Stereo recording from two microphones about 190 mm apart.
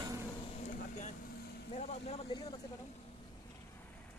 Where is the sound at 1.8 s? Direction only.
35° left (ahead or behind).